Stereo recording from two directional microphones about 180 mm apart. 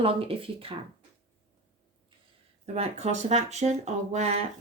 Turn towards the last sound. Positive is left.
turn(degrees=-40)  # may be behind; listen again after turning